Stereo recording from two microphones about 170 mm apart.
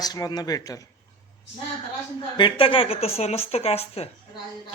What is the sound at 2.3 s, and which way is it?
A woman's voice, 30° left (ahead or behind).